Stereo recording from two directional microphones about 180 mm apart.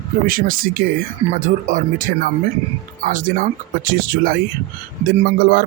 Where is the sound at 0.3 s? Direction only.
50° right (ahead or behind).